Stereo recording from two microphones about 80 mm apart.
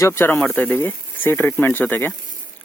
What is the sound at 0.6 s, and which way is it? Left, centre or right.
Speech, left.